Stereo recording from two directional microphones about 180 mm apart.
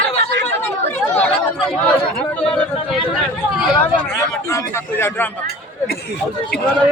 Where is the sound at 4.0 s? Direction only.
15° left (ahead or behind).